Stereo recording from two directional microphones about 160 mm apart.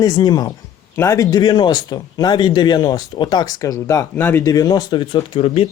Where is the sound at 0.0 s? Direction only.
25° left (ahead or behind).